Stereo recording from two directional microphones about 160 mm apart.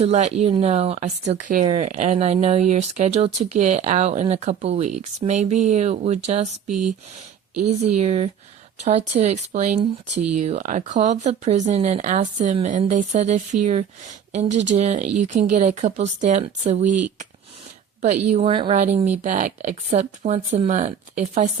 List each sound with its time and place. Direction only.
0.0 s speech: 45° right (ahead or behind)
6.7 s speech: 5° right (ahead or behind)
7.7 s speech: 45° right (ahead or behind)
14.5 s speech: 90° right
14.8 s speech: 45° right (ahead or behind)
18.0 s speech: 50° right (ahead or behind)